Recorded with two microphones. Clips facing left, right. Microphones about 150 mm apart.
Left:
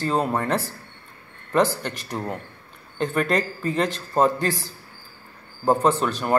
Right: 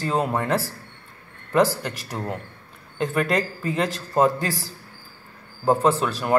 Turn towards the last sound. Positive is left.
turn(degrees=-5)  # may be behind; listen again after turning